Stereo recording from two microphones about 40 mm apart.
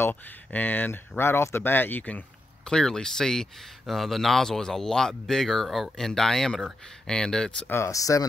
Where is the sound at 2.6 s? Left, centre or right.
Centre.